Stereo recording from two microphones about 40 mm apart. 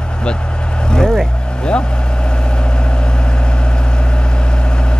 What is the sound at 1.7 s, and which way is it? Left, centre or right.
Vehicle, left.